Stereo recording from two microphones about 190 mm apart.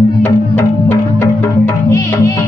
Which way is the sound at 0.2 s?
10° left (ahead or behind).